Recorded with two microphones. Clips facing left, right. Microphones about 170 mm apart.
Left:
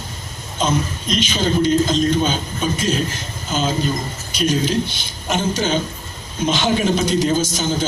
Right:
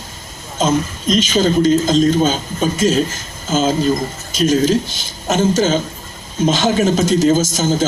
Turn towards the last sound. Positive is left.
turn(degrees=-45)  # may be behind; listen again after turning